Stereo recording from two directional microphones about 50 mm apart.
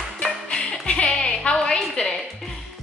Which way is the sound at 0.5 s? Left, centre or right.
Left.